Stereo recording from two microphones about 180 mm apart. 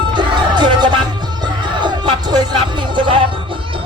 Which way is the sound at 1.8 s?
25° right (ahead or behind).